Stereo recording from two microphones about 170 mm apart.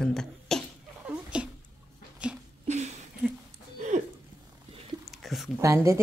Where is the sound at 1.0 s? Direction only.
5° right (ahead or behind).